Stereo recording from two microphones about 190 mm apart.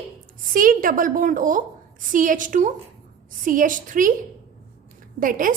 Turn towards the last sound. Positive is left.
turn(degrees=-45)  # may be behind; listen again after turning